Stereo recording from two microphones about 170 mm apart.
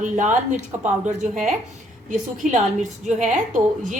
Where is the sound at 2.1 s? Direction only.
45° right (ahead or behind).